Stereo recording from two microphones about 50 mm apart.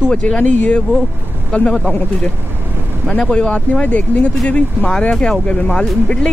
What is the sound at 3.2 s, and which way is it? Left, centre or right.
Speech, left.